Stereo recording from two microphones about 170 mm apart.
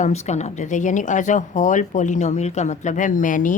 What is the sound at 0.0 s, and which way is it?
A woman's voice, 40° left (ahead or behind).